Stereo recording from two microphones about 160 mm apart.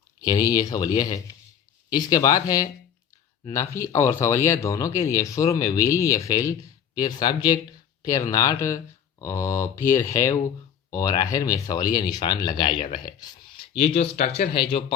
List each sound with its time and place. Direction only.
0.2 s speech: 20° left (ahead or behind)